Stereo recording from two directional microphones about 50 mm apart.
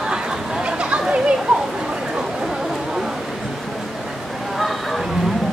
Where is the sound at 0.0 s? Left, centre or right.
Centre.